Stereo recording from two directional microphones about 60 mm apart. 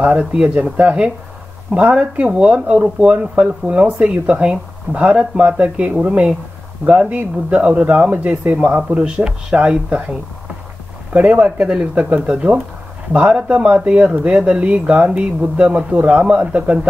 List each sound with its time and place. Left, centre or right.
0.0 s speech: centre
11.1 s speech: centre